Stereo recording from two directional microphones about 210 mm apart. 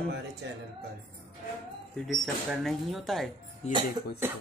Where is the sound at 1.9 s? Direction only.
Centre (ahead or behind).